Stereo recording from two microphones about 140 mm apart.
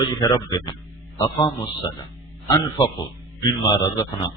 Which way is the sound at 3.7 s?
30° left (ahead or behind).